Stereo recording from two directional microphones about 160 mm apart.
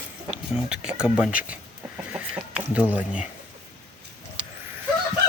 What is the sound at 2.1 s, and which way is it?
Chicken, 10° right (ahead or behind).